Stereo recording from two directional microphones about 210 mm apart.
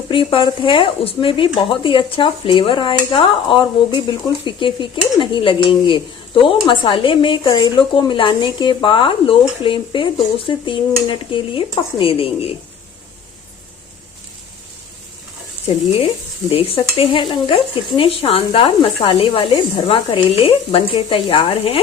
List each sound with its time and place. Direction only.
0.1 s dishes: 25° left (ahead or behind)
16.5 s dishes: 25° left (ahead or behind)